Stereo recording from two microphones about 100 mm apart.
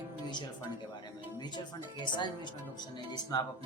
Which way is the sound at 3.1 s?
45° left (ahead or behind).